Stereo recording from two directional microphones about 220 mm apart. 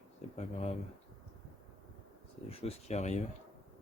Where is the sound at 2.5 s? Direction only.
30° left (ahead or behind).